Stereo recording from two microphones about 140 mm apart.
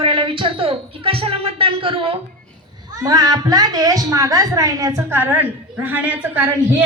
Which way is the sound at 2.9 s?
25° right (ahead or behind).